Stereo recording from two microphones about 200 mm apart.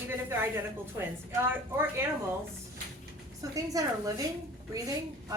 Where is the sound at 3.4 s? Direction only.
15° right (ahead or behind).